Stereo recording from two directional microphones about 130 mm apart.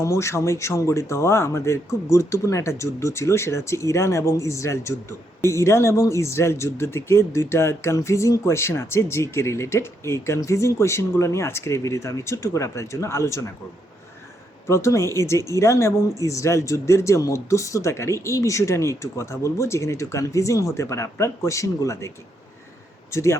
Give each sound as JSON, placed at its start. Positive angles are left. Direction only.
{"t": 0.0, "sound": "speech", "side_deg": 20}
{"t": 14.7, "sound": "speech", "side_deg": 25}
{"t": 23.1, "sound": "speech", "side_deg": 20}